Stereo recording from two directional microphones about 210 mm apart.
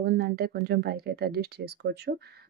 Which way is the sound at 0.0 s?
50° right (ahead or behind).